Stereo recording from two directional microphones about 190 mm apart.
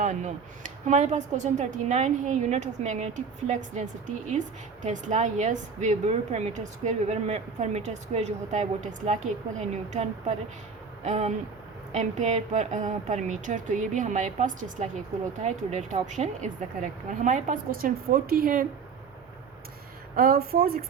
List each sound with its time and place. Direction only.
0.0 s a woman's voice: 40° right (ahead or behind)
20.1 s a woman's voice: 50° right (ahead or behind)